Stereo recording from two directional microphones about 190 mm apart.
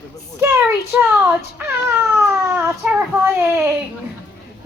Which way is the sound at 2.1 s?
10° right (ahead or behind).